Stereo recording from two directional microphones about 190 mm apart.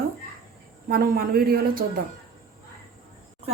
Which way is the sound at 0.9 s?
55° right (ahead or behind).